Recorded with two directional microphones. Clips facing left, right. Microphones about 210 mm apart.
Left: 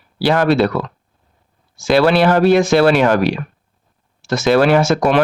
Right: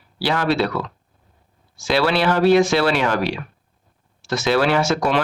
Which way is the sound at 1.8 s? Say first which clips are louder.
Left 6 dB; 50° left (ahead or behind).